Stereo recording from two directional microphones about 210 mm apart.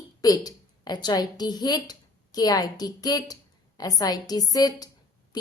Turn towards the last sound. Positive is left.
turn(degrees=20)  # may be behind; listen again after turning